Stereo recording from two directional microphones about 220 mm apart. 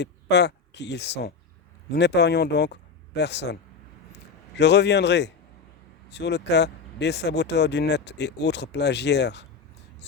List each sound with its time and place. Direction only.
0.0 s speech: 50° left (ahead or behind)